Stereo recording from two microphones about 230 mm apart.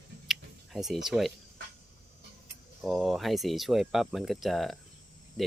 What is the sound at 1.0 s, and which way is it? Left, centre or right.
Speech, centre.